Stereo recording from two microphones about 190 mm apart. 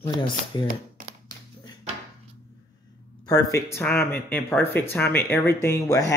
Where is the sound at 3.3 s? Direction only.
15° left (ahead or behind).